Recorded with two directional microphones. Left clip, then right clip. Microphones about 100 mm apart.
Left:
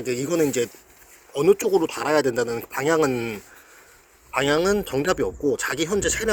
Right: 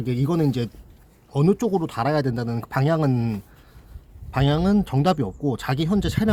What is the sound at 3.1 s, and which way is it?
Speech, 25° right (ahead or behind).